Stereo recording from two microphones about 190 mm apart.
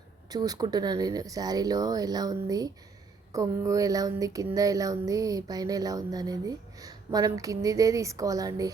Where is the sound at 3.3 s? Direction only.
15° right (ahead or behind).